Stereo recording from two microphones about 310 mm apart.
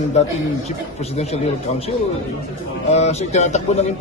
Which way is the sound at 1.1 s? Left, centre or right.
Centre.